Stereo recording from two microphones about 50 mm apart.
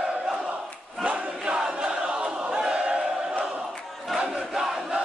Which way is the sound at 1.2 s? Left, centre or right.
Centre.